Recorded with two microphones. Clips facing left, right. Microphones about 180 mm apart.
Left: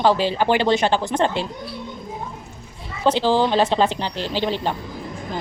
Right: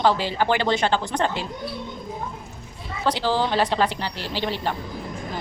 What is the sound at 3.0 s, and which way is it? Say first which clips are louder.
A woman's voice: left 5 dB; 20° left (ahead or behind).